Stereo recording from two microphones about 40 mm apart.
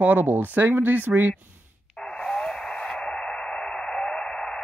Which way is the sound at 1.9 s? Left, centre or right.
Centre.